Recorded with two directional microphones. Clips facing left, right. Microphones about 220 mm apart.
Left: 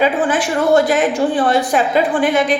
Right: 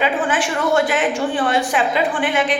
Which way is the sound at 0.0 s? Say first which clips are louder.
Left 4 dB; 40° left (ahead or behind).